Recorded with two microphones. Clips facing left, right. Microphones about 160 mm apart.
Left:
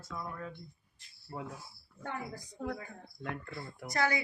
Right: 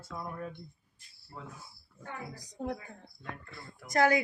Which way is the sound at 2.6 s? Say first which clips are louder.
Right 2 dB; 20° right (ahead or behind).